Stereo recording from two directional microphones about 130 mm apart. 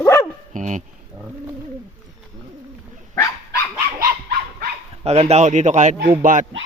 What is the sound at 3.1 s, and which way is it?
Dog, 25° left (ahead or behind).